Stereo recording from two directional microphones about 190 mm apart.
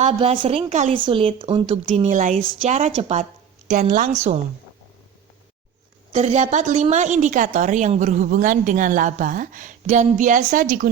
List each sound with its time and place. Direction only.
0.0 s speech: 30° right (ahead or behind)
0.9 s speech: 25° right (ahead or behind)
2.0 s speech: 40° right (ahead or behind)
6.1 s speech: 35° right (ahead or behind)